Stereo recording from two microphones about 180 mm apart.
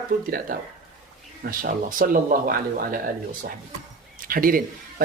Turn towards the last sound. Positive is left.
turn(degrees=-50)  # may be behind; listen again after turning